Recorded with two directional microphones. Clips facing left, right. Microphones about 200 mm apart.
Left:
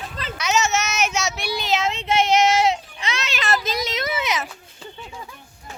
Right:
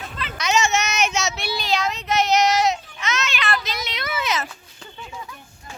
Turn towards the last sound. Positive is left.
turn(degrees=20)  # may be behind; listen again after turning